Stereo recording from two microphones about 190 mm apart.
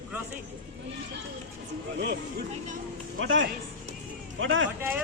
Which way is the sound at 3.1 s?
90° right.